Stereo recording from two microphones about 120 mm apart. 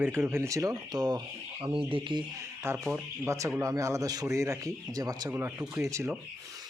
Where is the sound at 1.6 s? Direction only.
45° right (ahead or behind).